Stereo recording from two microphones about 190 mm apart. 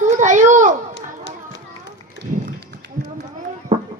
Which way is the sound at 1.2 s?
65° left (ahead or behind).